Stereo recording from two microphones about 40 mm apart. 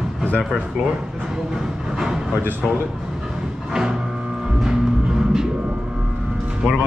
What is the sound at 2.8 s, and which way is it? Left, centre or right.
Music, centre.